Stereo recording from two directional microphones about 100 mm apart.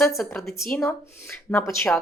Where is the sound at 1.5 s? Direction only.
15° left (ahead or behind).